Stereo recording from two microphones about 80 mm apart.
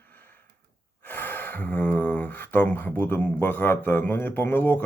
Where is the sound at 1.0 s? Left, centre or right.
Left.